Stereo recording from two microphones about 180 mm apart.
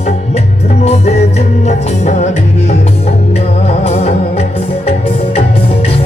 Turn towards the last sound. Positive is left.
turn(degrees=35)  # may be behind; listen again after turning